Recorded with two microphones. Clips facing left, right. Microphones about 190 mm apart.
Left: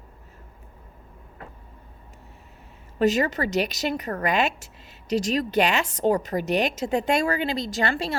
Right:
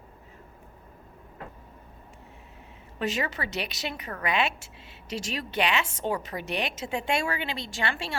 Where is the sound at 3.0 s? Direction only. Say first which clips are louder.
Left 9 dB; 40° left (ahead or behind).